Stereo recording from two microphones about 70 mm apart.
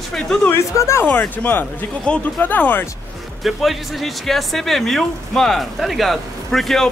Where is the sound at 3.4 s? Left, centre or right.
Centre.